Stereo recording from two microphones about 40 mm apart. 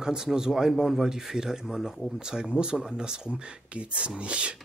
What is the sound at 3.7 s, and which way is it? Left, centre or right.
Speech, right.